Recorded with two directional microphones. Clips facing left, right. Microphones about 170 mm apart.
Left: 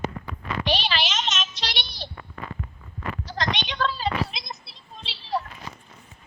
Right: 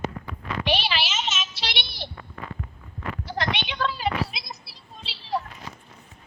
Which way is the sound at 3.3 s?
10° right (ahead or behind).